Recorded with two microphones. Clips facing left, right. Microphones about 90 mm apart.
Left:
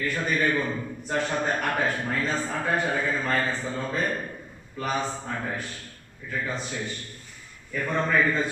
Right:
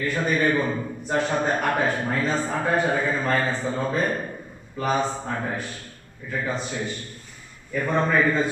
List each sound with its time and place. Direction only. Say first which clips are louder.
0.0 s a man's voice: right 3 dB; 15° right (ahead or behind)